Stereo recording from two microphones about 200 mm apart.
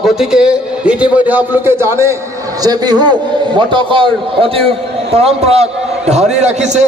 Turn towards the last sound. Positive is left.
turn(degrees=-35)  # may be behind; listen again after turning